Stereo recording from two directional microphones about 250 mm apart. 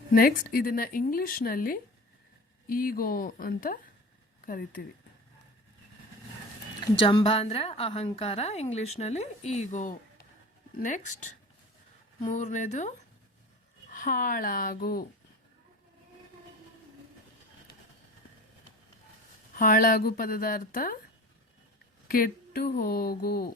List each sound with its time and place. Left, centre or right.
0.1 s a woman's voice: left
7.0 s a woman's voice: left
13.9 s a woman's voice: left
19.5 s a woman's voice: left
22.0 s a woman's voice: left